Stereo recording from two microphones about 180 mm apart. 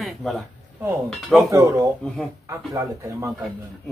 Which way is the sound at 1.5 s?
15° right (ahead or behind).